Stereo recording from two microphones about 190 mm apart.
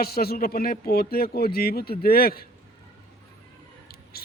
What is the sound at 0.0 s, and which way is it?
Speech, 55° left (ahead or behind).